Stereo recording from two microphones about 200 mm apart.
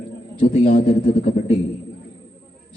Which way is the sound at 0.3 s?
40° left (ahead or behind).